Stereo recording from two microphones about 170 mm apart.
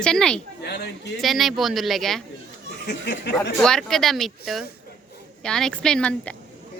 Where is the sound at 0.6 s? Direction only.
70° left (ahead or behind).